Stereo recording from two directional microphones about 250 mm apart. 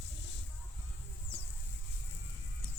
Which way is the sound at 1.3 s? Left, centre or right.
Centre.